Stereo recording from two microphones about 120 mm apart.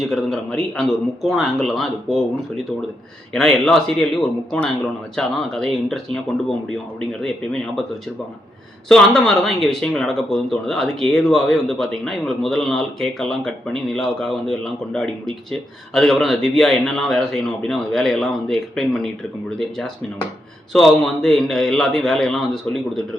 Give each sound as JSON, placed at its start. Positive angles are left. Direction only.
{"t": 0.0, "sound": "speech", "side_deg": 0}
{"t": 8.9, "sound": "speech", "side_deg": 5}